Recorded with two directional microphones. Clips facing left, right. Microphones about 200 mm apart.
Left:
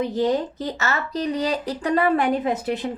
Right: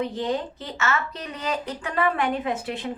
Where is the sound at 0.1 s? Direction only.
40° left (ahead or behind).